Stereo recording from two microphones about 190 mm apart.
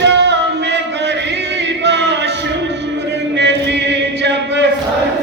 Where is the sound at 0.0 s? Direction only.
65° right (ahead or behind).